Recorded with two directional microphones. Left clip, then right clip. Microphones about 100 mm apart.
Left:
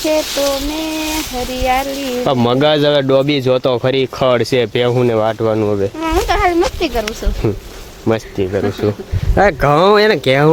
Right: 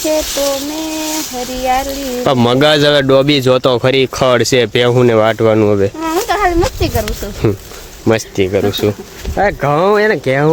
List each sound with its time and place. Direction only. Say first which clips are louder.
0.1 s speech: even; 10° left (ahead or behind)
1.6 s speech: right 1 dB; 15° left (ahead or behind)
2.2 s a man's voice: right 3 dB; 25° right (ahead or behind)
5.0 s speech: right 4 dB; 45° right (ahead or behind)
6.0 s insect: right 1 dB; 15° left (ahead or behind)
8.0 s speech: right 4 dB; 35° right (ahead or behind)
8.6 s speech: right 3 dB; 5° right (ahead or behind)
9.6 s speech: left 1 dB; 30° left (ahead or behind)
9.9 s speech: left 1 dB; 15° left (ahead or behind)